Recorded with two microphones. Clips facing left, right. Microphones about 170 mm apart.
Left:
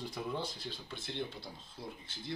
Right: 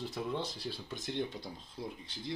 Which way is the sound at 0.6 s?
10° right (ahead or behind).